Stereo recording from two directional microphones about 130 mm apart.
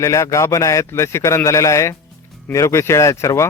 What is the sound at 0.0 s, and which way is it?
Speech, 25° left (ahead or behind).